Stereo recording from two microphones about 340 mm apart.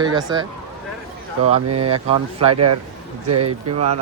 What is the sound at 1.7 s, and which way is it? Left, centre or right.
Speech, right.